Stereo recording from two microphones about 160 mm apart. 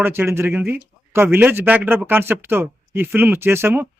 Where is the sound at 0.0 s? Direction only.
15° right (ahead or behind).